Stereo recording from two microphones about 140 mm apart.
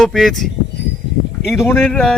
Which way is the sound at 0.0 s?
Centre (ahead or behind).